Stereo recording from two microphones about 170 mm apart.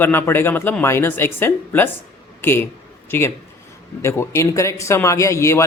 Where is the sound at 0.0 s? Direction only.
10° left (ahead or behind).